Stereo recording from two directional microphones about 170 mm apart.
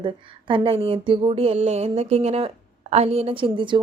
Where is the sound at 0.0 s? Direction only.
30° right (ahead or behind).